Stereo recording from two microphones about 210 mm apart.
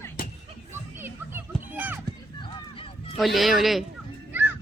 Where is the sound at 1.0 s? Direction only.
10° right (ahead or behind).